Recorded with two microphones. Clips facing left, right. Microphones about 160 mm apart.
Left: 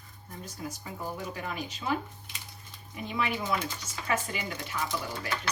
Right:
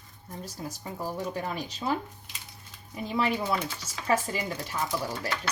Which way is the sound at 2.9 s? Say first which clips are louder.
Right 4 dB; 35° right (ahead or behind).